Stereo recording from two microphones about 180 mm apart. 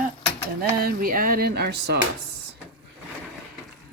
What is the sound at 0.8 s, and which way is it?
Speech, 55° right (ahead or behind).